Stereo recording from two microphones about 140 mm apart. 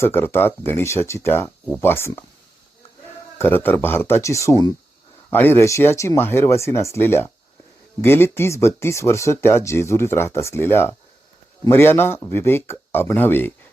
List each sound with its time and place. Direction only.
0.0 s speech: 15° left (ahead or behind)
3.3 s speech: 15° left (ahead or behind)